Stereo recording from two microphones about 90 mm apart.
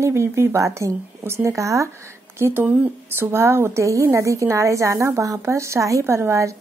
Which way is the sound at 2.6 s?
20° right (ahead or behind).